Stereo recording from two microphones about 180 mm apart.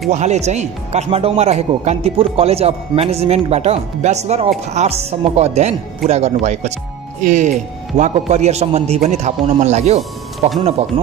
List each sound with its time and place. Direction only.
0.1 s speech: 40° right (ahead or behind)